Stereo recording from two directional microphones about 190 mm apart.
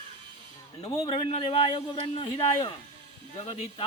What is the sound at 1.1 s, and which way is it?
A man's voice, 30° left (ahead or behind).